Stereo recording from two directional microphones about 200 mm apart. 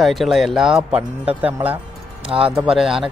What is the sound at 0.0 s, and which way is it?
Speech, centre (ahead or behind).